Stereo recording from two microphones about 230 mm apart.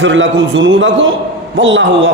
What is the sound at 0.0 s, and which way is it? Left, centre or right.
A man's voice, right.